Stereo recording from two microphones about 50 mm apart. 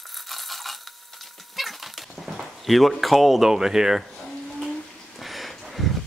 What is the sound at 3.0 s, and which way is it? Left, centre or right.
Speech, centre.